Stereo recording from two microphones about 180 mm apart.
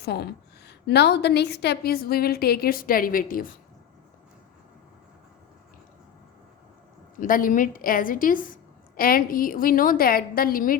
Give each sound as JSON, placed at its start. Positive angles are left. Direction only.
{"t": 0.0, "sound": "a woman's voice", "side_deg": 65}
{"t": 7.2, "sound": "a woman's voice", "side_deg": 50}